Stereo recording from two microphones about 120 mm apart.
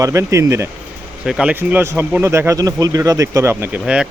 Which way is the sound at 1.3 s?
5° right (ahead or behind).